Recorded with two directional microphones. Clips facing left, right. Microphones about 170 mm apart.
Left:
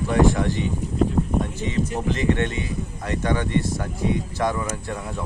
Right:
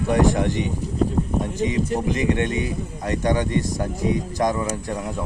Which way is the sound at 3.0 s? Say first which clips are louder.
Right 3 dB; 40° right (ahead or behind).